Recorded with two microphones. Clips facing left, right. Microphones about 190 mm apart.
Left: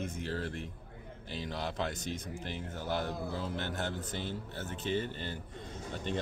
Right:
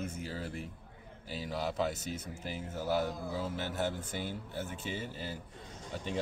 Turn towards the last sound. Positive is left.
turn(degrees=-10)  # may be behind; listen again after turning